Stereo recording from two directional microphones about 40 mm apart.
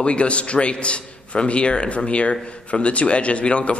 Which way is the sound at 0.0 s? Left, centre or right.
Left.